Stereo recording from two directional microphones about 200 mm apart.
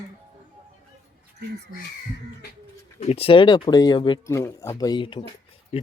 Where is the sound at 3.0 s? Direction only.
30° left (ahead or behind).